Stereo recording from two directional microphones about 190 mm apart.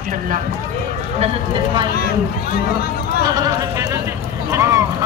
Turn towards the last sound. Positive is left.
turn(degrees=-15)  # may be behind; listen again after turning